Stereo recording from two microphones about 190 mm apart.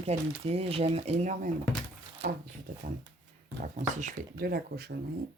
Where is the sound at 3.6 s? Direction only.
40° right (ahead or behind).